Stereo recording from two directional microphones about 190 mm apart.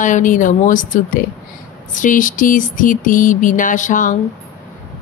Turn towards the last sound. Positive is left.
turn(degrees=40)  # may be behind; listen again after turning